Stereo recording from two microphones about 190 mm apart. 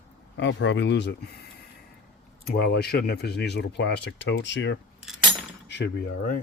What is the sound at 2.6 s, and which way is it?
Speech, 55° left (ahead or behind).